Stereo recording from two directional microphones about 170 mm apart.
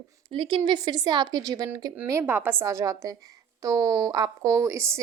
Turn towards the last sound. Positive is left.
turn(degrees=-15)  # may be behind; listen again after turning